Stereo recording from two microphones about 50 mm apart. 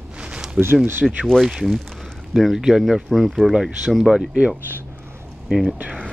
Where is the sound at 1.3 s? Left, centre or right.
Centre.